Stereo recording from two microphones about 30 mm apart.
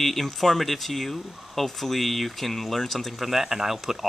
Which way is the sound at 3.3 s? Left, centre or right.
Centre.